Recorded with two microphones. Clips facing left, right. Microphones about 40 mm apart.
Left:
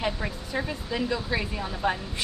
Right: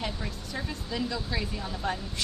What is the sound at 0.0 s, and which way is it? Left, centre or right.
Speech, left.